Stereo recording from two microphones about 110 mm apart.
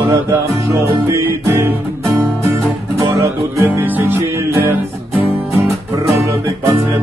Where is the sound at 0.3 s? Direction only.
25° right (ahead or behind).